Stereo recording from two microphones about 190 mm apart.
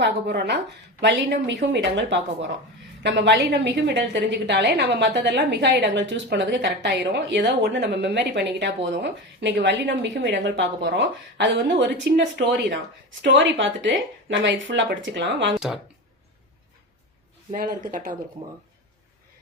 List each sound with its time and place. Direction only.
0.0 s a woman's voice: 60° right (ahead or behind)
17.5 s speech: 45° right (ahead or behind)